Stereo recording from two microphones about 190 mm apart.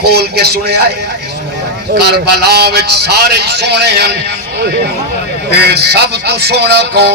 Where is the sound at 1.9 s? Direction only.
60° right (ahead or behind).